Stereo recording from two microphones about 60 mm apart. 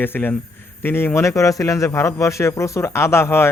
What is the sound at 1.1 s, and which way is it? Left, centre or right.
A man's voice, left.